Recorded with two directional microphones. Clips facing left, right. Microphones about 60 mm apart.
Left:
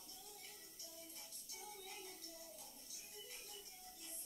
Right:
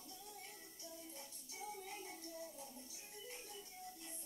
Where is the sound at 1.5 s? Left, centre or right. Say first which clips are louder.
Right 6 dB; right.